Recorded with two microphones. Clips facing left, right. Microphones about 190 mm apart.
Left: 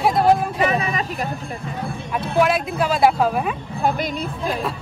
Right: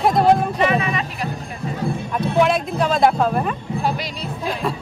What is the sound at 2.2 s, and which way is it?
Speech, 5° left (ahead or behind).